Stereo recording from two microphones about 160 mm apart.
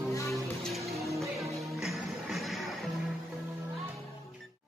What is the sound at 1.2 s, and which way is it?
Music, centre (ahead or behind).